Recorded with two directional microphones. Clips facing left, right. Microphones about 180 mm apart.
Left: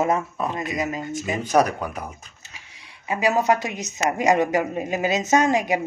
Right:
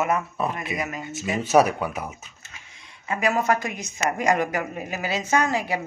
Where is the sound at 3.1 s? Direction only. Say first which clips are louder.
Left 2 dB; 20° left (ahead or behind).